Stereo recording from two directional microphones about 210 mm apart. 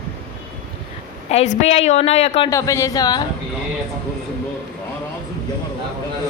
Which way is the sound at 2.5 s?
15° left (ahead or behind).